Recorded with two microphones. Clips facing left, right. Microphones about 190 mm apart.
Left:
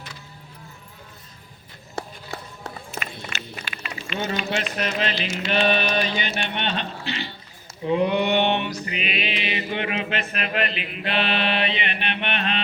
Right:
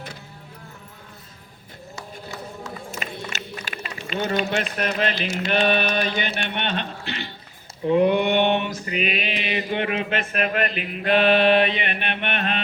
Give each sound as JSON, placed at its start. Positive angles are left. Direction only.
{"t": 2.0, "sound": "run", "side_deg": 60}
{"t": 3.0, "sound": "run", "side_deg": -45}
{"t": 4.2, "sound": "mantra", "side_deg": -55}